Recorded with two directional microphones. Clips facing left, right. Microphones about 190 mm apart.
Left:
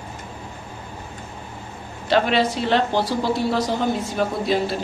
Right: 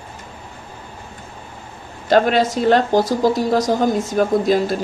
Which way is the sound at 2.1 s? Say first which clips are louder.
Right 4 dB; 45° right (ahead or behind).